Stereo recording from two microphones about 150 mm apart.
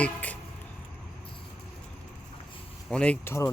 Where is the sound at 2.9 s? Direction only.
5° left (ahead or behind).